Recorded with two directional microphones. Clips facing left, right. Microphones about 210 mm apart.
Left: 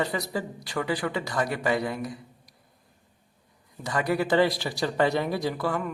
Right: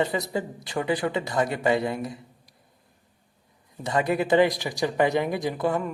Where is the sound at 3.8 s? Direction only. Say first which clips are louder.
Right 2 dB; 25° right (ahead or behind).